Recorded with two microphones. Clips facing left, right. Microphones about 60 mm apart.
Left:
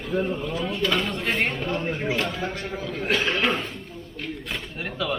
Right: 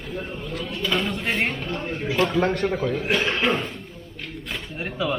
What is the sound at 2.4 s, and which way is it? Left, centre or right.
Speech, right.